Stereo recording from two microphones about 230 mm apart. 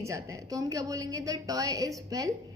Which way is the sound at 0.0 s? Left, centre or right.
Centre.